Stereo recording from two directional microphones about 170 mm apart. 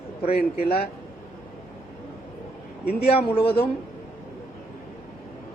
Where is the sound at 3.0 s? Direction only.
35° left (ahead or behind).